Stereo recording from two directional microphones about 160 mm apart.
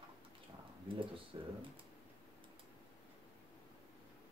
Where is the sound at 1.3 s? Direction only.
30° right (ahead or behind).